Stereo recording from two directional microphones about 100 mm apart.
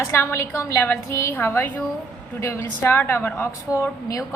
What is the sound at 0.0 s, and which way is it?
A woman's voice, 25° left (ahead or behind).